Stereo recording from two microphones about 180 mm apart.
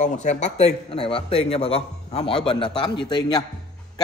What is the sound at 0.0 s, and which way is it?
A man's voice, 40° left (ahead or behind).